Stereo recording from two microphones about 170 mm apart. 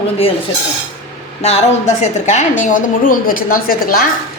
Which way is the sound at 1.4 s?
40° left (ahead or behind).